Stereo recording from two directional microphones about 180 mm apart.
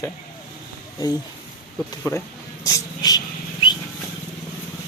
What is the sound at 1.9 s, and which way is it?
Speech, 15° left (ahead or behind).